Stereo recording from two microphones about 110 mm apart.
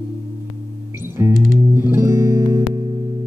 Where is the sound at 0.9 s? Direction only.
20° right (ahead or behind).